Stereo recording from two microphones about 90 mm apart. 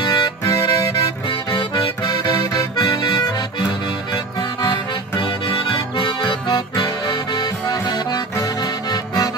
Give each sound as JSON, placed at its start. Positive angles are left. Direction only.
{"t": 0.1, "sound": "music", "side_deg": 45}
{"t": 2.8, "sound": "accordion", "side_deg": 50}
{"t": 4.1, "sound": "music", "side_deg": 45}
{"t": 5.2, "sound": "music", "side_deg": 60}
{"t": 7.1, "sound": "accordion", "side_deg": 50}
{"t": 8.9, "sound": "music", "side_deg": 45}